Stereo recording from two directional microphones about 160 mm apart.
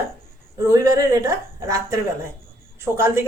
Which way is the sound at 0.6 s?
20° right (ahead or behind).